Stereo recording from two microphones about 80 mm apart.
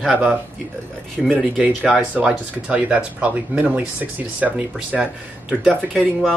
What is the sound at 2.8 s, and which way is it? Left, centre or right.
Speech, centre.